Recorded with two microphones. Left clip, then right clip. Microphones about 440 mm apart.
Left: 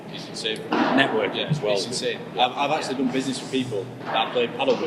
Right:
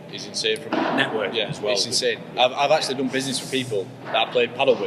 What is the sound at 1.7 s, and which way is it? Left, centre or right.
A man's voice, right.